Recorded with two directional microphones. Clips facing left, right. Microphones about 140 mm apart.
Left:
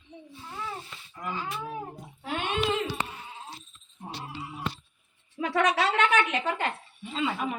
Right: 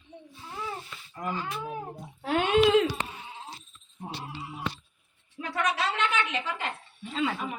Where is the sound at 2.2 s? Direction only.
90° right.